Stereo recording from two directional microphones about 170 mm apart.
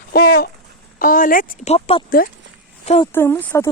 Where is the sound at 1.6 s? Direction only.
35° left (ahead or behind).